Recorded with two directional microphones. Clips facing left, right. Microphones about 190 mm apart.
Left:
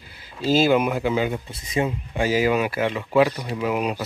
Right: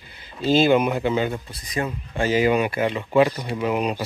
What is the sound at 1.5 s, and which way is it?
Speech, 25° left (ahead or behind).